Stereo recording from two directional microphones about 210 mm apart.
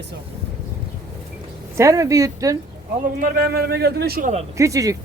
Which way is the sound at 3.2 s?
45° right (ahead or behind).